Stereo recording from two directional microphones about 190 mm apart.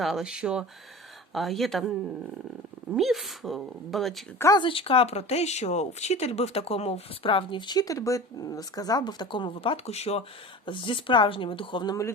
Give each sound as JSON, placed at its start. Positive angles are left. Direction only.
{"t": 0.0, "sound": "speech", "side_deg": 0}
{"t": 4.4, "sound": "speech", "side_deg": 20}